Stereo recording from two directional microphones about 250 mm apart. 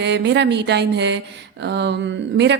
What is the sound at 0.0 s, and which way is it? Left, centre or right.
A woman's voice, right.